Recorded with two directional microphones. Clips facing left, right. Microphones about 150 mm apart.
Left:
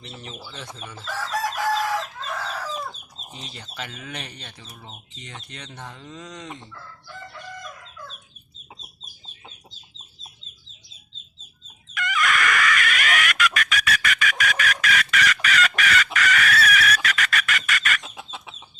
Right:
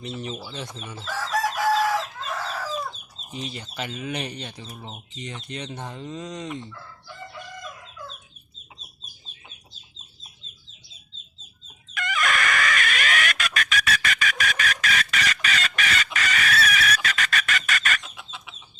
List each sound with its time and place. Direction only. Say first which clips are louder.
0.0 s speech: right 6 dB; 20° right (ahead or behind)
1.0 s chicken: right 1 dB; 5° right (ahead or behind)
3.5 s speech: right 4 dB; 15° right (ahead or behind)
4.6 s speech: right 4 dB; 25° right (ahead or behind)
11.9 s chicken: left 2 dB; 30° right (ahead or behind)
18.2 s chicken: left 4 dB; 35° left (ahead or behind)